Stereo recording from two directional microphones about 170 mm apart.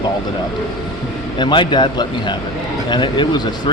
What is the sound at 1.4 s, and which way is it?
Speech, 30° left (ahead or behind).